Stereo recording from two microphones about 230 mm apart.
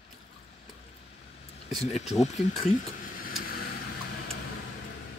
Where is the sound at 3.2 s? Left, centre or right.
Left.